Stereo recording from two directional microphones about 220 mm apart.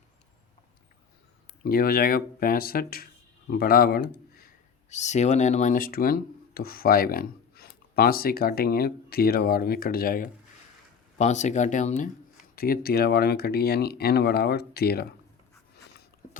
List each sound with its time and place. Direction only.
1.6 s speech: 45° left (ahead or behind)